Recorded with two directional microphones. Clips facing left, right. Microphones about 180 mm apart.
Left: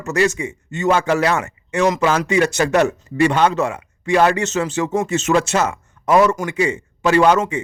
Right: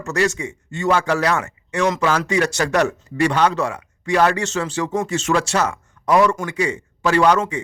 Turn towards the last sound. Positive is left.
turn(degrees=25)  # may be behind; listen again after turning